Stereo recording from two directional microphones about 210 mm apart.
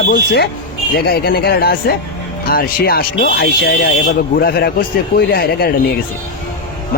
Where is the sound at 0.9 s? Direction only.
45° left (ahead or behind).